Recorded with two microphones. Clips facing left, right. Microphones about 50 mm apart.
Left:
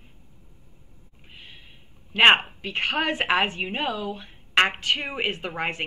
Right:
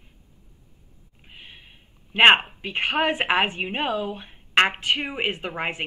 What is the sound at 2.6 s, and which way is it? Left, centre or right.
Speech, centre.